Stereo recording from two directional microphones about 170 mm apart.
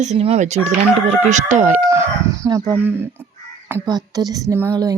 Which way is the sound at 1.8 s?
20° right (ahead or behind).